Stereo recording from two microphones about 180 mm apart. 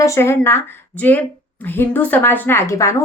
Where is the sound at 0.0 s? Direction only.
15° left (ahead or behind).